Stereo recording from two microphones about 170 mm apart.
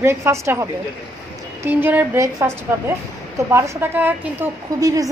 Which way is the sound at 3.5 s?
15° right (ahead or behind).